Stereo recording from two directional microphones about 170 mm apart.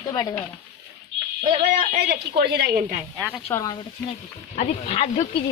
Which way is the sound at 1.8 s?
65° right (ahead or behind).